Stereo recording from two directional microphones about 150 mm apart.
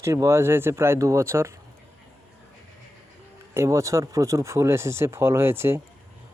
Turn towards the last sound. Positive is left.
turn(degrees=-15)  # may be behind; listen again after turning